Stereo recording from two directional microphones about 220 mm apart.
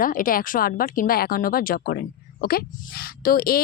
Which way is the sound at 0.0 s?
40° left (ahead or behind).